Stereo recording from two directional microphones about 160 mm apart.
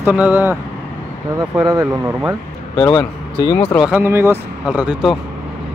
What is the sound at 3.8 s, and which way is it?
Speech, 10° right (ahead or behind).